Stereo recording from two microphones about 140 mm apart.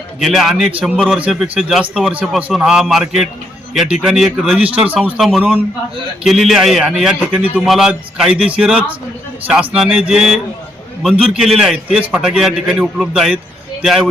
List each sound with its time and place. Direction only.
0.2 s a man's voice: centre (ahead or behind)